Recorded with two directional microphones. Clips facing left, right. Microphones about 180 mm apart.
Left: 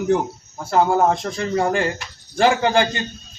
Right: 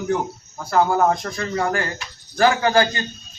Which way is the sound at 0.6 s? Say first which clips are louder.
Left 1 dB; 25° left (ahead or behind).